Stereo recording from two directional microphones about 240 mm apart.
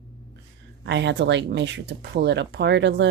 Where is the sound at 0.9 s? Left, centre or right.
Right.